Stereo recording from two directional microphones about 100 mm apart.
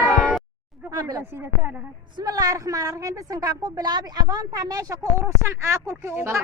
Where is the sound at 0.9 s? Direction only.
40° right (ahead or behind).